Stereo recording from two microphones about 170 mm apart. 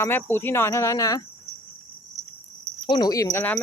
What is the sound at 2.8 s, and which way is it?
Speech, 25° left (ahead or behind).